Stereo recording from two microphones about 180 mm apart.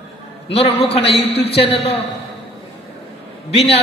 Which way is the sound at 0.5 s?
35° left (ahead or behind).